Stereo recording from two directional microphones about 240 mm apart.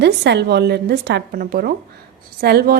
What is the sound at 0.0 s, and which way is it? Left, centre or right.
A woman's voice, right.